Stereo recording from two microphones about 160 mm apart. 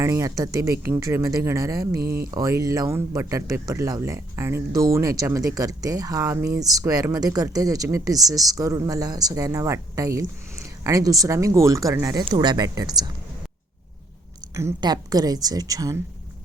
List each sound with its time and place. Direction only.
0.0 s speech: 20° right (ahead or behind)
2.0 s speech: 70° right (ahead or behind)
2.3 s speech: 20° right (ahead or behind)
14.5 s speech: 25° right (ahead or behind)